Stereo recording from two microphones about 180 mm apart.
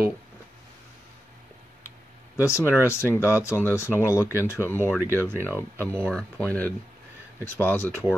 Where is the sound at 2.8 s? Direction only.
15° left (ahead or behind).